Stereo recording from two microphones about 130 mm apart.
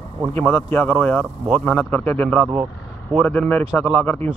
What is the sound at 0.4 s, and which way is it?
Speech, 15° left (ahead or behind).